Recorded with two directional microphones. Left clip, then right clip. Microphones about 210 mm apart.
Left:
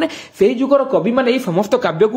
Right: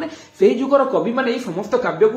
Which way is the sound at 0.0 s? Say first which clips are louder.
Left 2 dB; 40° left (ahead or behind).